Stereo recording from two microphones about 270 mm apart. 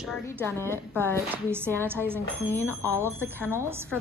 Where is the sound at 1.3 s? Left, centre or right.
Centre.